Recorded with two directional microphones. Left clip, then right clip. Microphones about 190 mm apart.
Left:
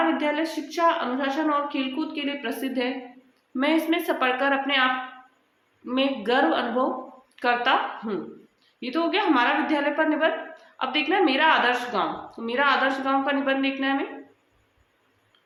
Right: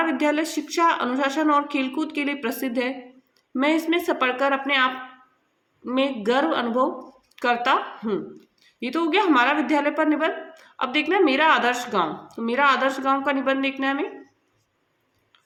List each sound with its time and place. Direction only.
0.2 s a woman's voice: 50° right (ahead or behind)